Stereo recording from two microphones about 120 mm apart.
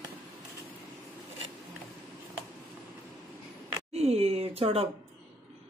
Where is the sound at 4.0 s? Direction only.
60° right (ahead or behind).